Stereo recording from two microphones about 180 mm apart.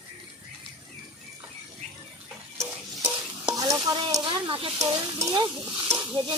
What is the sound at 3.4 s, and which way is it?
Stir, 20° right (ahead or behind).